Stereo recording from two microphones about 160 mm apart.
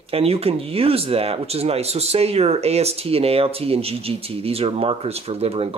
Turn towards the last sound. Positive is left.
turn(degrees=-40)  # may be behind; listen again after turning